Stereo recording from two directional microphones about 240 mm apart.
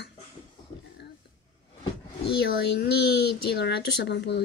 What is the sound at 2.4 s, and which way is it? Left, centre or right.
Speech, left.